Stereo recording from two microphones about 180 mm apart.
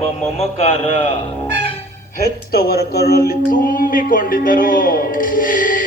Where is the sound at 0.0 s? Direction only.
35° left (ahead or behind).